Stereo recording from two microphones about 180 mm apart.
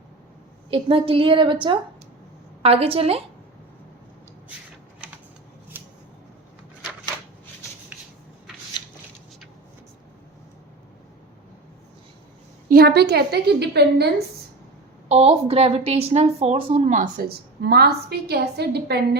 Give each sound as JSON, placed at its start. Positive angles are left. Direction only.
{"t": 0.7, "sound": "a woman's voice", "side_deg": -30}
{"t": 2.6, "sound": "a woman's voice", "side_deg": -35}
{"t": 5.7, "sound": "scissors", "side_deg": -10}
{"t": 12.6, "sound": "a woman's voice", "side_deg": -60}
{"t": 15.1, "sound": "a woman's voice", "side_deg": -35}